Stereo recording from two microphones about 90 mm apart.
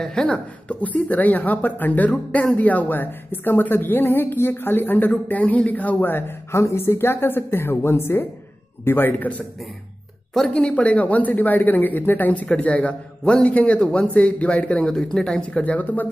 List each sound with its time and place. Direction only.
0.0 s speech: 10° left (ahead or behind); by 9.3 s 25° left (ahead or behind)
10.3 s speech: 5° left (ahead or behind)